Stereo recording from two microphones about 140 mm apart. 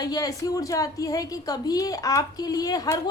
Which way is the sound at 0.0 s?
25° left (ahead or behind).